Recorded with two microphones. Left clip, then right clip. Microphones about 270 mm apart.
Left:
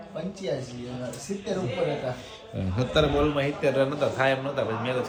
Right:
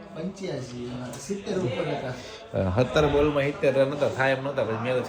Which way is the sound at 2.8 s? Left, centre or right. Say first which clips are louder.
Right 1 dB; centre.